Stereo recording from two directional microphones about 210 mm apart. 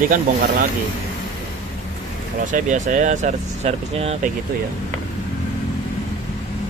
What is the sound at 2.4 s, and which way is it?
Speech, 40° right (ahead or behind).